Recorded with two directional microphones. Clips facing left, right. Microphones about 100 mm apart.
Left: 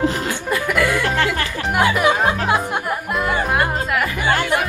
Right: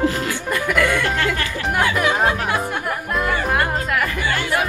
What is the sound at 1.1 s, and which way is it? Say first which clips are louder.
Speech: left 2 dB; 20° left (ahead or behind).